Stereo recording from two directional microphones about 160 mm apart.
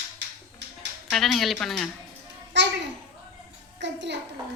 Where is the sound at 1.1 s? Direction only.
Centre (ahead or behind).